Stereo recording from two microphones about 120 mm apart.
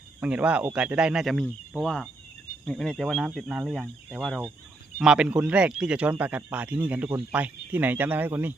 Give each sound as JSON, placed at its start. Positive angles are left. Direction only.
{"t": 0.2, "sound": "speech", "side_deg": -10}